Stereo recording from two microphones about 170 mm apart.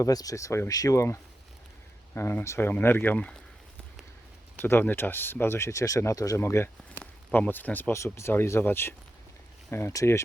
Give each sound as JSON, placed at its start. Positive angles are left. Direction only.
{"t": 0.0, "sound": "speech", "side_deg": 20}
{"t": 4.6, "sound": "speech", "side_deg": 10}